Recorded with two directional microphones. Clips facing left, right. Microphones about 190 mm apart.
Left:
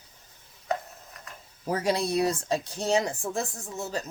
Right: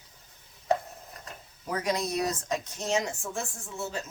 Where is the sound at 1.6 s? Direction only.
30° left (ahead or behind).